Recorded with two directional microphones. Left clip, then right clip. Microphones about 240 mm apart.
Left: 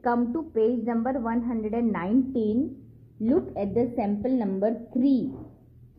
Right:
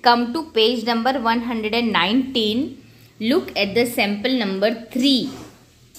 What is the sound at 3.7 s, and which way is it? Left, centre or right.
A woman's voice, right.